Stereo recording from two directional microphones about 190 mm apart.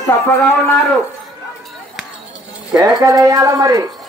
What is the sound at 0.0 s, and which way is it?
Speech, 10° left (ahead or behind).